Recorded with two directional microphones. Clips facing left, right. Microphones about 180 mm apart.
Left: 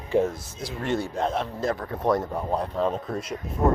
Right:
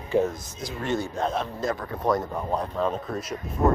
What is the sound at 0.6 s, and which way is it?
Speech, 30° left (ahead or behind).